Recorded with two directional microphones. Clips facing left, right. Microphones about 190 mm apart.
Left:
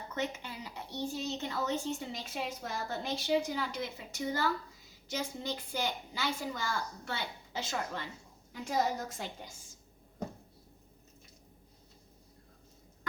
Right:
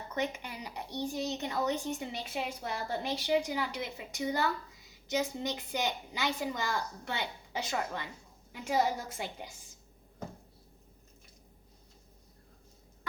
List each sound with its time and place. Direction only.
0.2 s a woman's voice: 15° right (ahead or behind)